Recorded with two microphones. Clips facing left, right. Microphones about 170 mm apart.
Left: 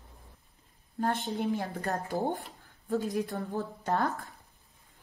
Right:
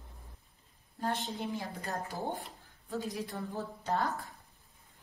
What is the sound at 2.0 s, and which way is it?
A woman's voice, 40° left (ahead or behind).